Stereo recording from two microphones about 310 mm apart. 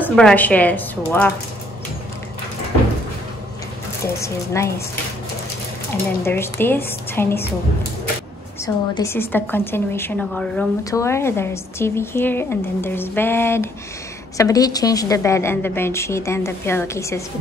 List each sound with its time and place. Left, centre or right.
0.0 s a woman's voice: centre
4.2 s a woman's voice: centre
6.2 s a woman's voice: centre
8.6 s a woman's voice: centre